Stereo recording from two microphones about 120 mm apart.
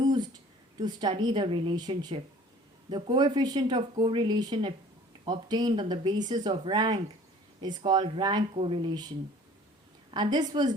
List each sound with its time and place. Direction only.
0.0 s a sound: 35° right (ahead or behind)
0.8 s speech: 35° right (ahead or behind)
10.3 s speech: 35° right (ahead or behind)